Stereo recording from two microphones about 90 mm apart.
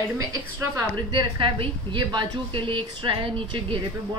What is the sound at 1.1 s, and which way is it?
A woman's voice, 65° right (ahead or behind).